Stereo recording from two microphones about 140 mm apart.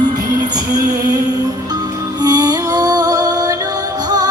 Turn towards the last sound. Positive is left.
turn(degrees=-25)  # may be behind; listen again after turning